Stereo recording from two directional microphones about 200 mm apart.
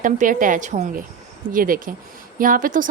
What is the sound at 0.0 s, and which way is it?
A woman's voice, 40° right (ahead or behind).